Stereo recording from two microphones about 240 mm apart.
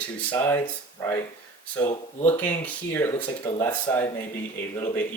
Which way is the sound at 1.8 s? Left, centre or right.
Centre.